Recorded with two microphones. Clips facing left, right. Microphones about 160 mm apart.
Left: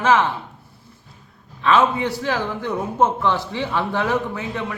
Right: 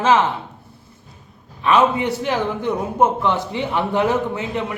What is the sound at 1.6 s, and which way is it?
A man's voice, 15° right (ahead or behind).